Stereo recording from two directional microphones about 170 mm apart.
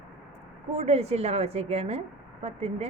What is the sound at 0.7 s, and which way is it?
A woman's voice, 40° right (ahead or behind).